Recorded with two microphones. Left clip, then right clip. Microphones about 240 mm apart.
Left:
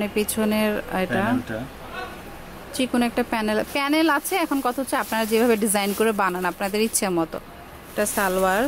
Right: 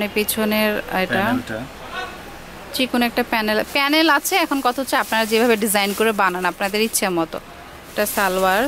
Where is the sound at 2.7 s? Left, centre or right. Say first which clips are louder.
Right 4 dB; centre.